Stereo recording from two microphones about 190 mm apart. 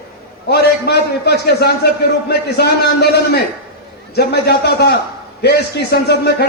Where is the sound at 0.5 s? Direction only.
60° left (ahead or behind).